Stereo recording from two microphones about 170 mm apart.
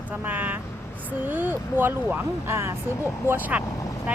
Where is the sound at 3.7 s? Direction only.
20° left (ahead or behind).